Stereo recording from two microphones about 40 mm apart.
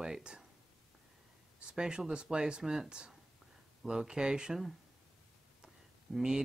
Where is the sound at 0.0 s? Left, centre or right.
Centre.